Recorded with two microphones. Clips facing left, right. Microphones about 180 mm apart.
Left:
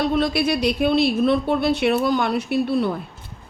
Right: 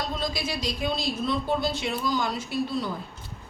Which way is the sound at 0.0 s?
65° left (ahead or behind).